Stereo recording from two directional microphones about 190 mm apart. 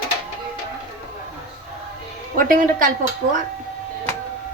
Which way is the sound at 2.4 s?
45° right (ahead or behind).